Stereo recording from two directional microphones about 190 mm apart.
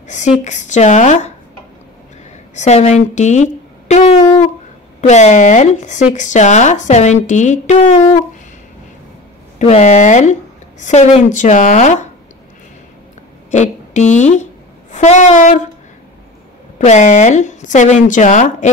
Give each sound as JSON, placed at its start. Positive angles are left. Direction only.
{"t": 0.1, "sound": "a woman's voice", "side_deg": 40}
{"t": 2.5, "sound": "a woman's voice", "side_deg": 35}
{"t": 9.6, "sound": "a woman's voice", "side_deg": 35}
{"t": 13.5, "sound": "a woman's voice", "side_deg": 40}
{"t": 16.7, "sound": "a woman's voice", "side_deg": 40}